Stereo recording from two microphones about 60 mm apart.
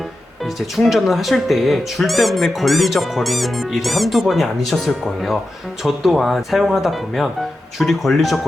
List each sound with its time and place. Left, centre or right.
0.8 s speech: centre